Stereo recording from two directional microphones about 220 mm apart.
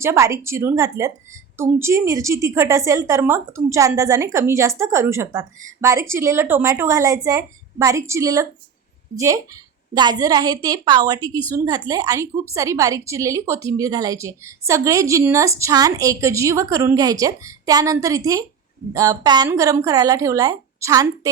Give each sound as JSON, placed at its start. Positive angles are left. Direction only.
{"t": 0.0, "sound": "a woman's voice", "side_deg": -10}